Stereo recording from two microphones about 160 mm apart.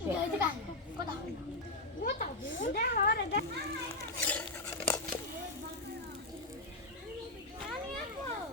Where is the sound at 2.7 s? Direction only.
75° left (ahead or behind).